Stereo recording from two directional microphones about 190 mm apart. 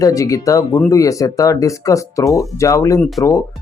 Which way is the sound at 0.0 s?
15° left (ahead or behind).